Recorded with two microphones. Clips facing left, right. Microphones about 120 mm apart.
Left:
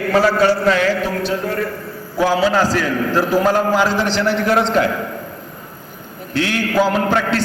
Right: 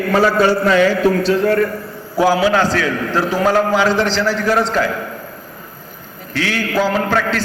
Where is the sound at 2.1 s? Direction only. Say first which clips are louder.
Right 2 dB; 5° right (ahead or behind).